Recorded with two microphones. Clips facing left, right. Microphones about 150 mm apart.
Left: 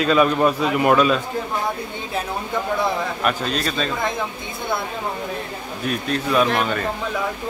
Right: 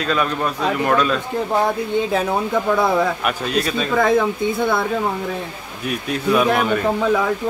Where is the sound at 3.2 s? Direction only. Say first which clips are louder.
Right 1 dB; 5° right (ahead or behind).